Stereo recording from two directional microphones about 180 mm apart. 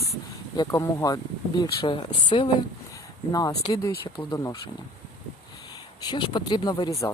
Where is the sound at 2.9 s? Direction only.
20° left (ahead or behind).